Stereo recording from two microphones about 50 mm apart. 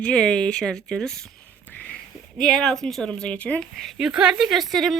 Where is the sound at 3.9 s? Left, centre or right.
Centre.